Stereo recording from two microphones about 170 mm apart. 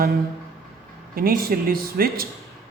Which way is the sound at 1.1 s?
60° right (ahead or behind).